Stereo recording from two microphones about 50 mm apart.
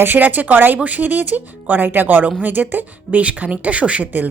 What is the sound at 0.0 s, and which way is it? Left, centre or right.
Speech, right.